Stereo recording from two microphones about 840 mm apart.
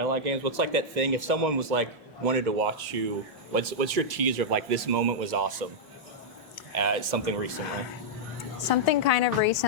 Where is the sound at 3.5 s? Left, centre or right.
Right.